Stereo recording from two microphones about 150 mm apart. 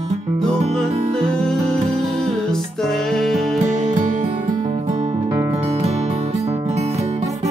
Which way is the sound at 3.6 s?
55° right (ahead or behind).